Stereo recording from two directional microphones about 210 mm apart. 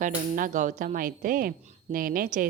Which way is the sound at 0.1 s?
40° right (ahead or behind).